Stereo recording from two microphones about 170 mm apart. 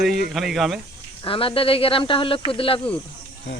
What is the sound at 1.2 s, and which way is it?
Speech, 30° left (ahead or behind).